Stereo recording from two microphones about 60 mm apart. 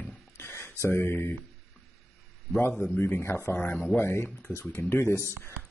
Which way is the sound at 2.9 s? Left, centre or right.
Left.